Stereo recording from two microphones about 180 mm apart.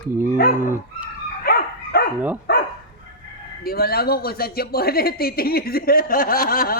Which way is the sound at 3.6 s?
60° left (ahead or behind).